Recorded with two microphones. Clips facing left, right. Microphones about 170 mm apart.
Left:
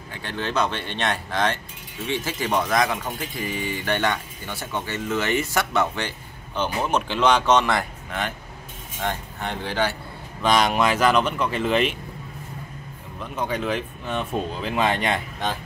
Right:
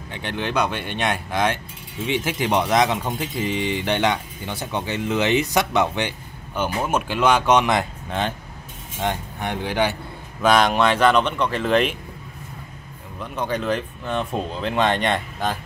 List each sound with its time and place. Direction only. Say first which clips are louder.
0.1 s speech: right 2 dB; 20° right (ahead or behind)
9.0 s speech: right 3 dB; 15° right (ahead or behind)
10.4 s speech: right 3 dB; centre (ahead or behind)
13.2 s speech: right 1 dB; centre (ahead or behind)